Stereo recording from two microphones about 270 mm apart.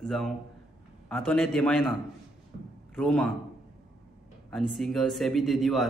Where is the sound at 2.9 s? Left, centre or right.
Centre.